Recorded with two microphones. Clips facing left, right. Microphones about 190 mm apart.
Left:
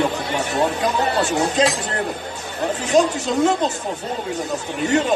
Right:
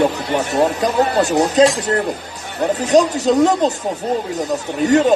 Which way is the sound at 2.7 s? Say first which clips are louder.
Right 3 dB; 40° right (ahead or behind).